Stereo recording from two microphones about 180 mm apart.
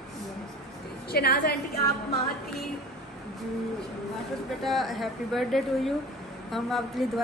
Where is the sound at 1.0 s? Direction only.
60° left (ahead or behind).